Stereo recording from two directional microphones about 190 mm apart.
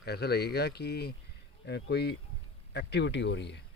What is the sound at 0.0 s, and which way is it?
Speech, 60° left (ahead or behind).